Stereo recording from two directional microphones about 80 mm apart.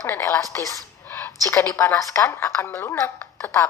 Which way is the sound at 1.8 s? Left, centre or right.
Left.